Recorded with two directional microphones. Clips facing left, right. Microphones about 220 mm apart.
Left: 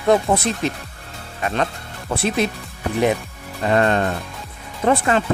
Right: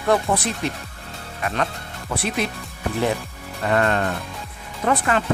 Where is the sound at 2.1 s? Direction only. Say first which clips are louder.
Left 4 dB; 30° left (ahead or behind).